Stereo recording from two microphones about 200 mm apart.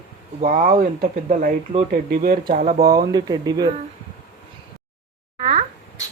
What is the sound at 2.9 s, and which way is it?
Speech, 20° right (ahead or behind).